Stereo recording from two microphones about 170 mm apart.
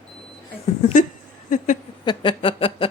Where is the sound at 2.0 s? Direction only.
25° left (ahead or behind).